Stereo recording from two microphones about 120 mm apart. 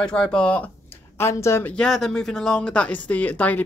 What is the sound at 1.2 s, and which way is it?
Speech, 25° left (ahead or behind).